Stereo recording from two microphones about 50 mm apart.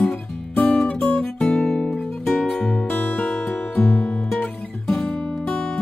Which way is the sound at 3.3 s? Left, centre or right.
Centre.